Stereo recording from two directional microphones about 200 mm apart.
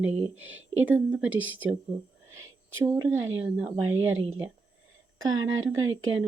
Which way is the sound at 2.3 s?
80° right.